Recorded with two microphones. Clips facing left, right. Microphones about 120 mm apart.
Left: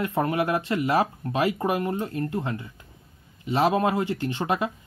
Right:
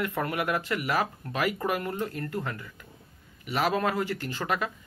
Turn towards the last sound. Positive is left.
turn(degrees=25)  # may be behind; listen again after turning